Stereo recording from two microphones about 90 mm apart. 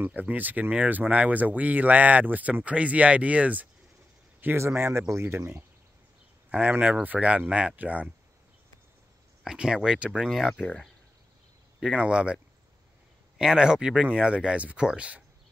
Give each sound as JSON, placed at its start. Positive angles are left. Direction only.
{"t": 0.0, "sound": "speech", "side_deg": -20}
{"t": 4.4, "sound": "speech", "side_deg": -25}
{"t": 6.5, "sound": "speech", "side_deg": -15}
{"t": 9.4, "sound": "speech", "side_deg": -5}
{"t": 10.5, "sound": "speech", "side_deg": 10}
{"t": 12.0, "sound": "speech", "side_deg": -10}
{"t": 13.4, "sound": "speech", "side_deg": -5}